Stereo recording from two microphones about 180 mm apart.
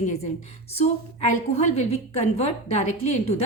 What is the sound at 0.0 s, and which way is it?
A woman's voice, 40° left (ahead or behind).